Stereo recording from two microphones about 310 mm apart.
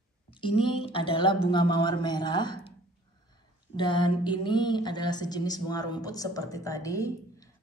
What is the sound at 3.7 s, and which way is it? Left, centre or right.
A woman's voice, centre.